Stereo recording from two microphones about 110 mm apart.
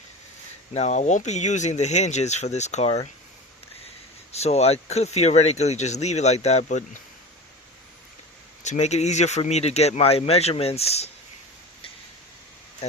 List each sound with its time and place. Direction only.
0.7 s speech: 85° left
4.3 s speech: 75° left (ahead or behind)
8.6 s speech: 90° left; by 11.1 s 70° left (ahead or behind)